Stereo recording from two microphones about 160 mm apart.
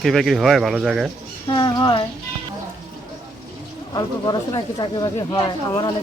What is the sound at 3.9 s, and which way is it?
Speech, 25° left (ahead or behind).